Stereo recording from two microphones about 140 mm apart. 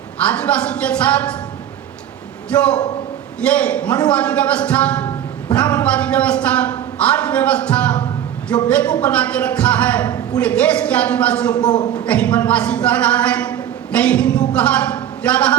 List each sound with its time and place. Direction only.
0.3 s a man's voice: 10° left (ahead or behind)
2.5 s a man's voice: 10° left (ahead or behind)
10.1 s a man's voice: 25° left (ahead or behind)
10.4 s a man's voice: 10° left (ahead or behind)